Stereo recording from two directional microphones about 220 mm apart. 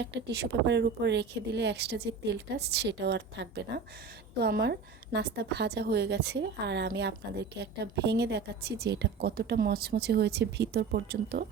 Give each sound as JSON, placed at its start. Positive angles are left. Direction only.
{"t": 0.0, "sound": "a woman's voice", "side_deg": -50}